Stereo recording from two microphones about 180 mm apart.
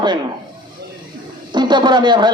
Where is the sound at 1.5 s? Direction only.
25° right (ahead or behind).